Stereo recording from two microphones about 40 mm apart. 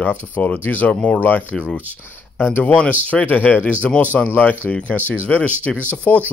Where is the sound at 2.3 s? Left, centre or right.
Left.